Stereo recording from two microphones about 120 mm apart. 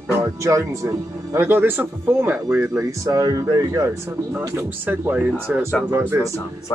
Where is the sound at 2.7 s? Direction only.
25° right (ahead or behind).